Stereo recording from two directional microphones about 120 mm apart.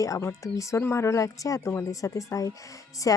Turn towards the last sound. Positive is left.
turn(degrees=30)  # may be behind; listen again after turning